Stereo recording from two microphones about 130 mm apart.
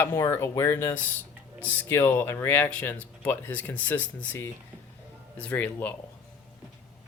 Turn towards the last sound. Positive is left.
turn(degrees=15)  # may be behind; listen again after turning